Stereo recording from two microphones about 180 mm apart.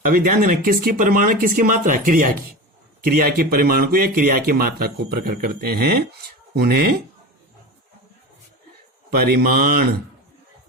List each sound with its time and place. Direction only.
0.1 s speech: 55° right (ahead or behind)
9.0 s speech: 60° right (ahead or behind)